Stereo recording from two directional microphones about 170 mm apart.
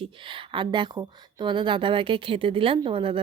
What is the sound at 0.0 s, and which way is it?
Speech, 30° right (ahead or behind).